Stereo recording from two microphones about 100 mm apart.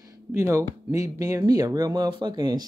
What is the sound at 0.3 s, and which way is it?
Speech, 30° right (ahead or behind).